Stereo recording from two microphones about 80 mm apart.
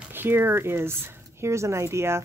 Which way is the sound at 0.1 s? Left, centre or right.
Right.